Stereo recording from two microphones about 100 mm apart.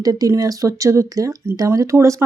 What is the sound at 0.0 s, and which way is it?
Speech, 35° right (ahead or behind).